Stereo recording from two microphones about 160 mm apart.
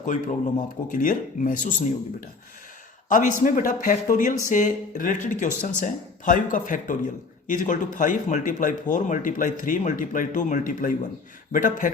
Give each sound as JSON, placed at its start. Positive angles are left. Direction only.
{"t": 0.0, "sound": "speech", "side_deg": 50}
{"t": 3.1, "sound": "speech", "side_deg": 55}